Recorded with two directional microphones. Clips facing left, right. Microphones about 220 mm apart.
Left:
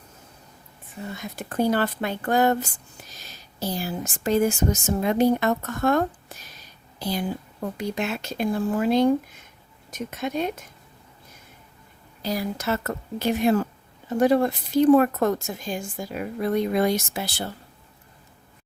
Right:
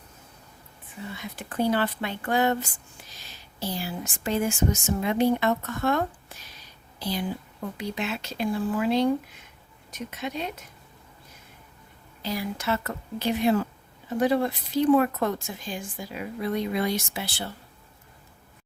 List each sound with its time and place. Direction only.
1.0 s speech: 45° left (ahead or behind)
12.2 s speech: 40° left (ahead or behind)